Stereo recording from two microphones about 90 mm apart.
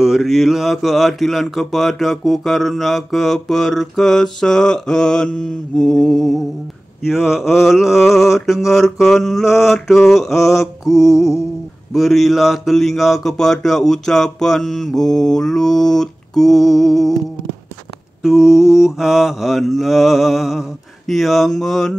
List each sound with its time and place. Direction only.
0.0 s mantra: 5° right (ahead or behind)
10.9 s music: 40° left (ahead or behind)
11.9 s mantra: centre (ahead or behind)
18.2 s mantra: 5° right (ahead or behind)